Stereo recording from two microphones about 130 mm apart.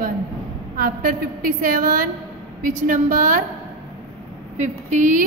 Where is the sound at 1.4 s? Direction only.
90° right.